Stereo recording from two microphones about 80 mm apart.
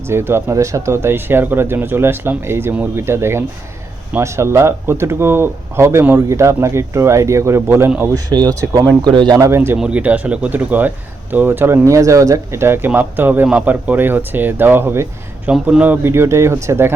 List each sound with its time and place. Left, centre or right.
0.1 s speech: right
3.0 s speech: right
8.1 s speech: right
9.4 s speech: right
9.7 s speech: centre
11.9 s speech: right; by 16.0 s centre
16.0 s speech: right